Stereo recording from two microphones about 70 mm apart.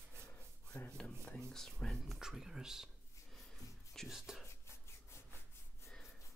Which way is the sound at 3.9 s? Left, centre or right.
Centre.